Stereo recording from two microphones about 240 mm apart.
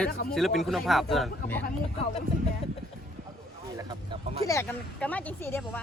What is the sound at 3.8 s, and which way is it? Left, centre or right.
Speech, centre.